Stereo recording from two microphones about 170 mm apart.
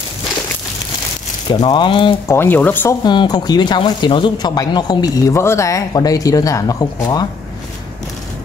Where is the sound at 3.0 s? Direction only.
25° left (ahead or behind).